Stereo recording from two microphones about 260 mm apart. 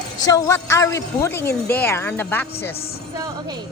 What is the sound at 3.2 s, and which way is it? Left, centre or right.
Speech, centre.